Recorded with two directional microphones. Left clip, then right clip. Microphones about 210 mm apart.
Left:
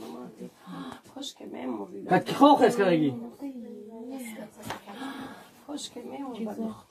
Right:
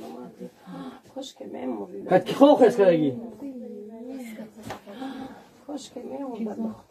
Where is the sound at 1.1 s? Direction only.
40° left (ahead or behind).